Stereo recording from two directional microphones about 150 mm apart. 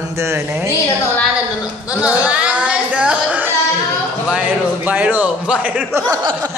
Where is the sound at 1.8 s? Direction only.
5° right (ahead or behind).